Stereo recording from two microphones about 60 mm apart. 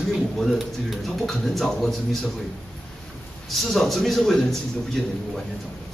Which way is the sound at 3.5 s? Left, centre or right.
Centre.